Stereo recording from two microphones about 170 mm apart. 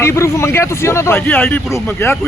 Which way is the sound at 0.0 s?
15° left (ahead or behind).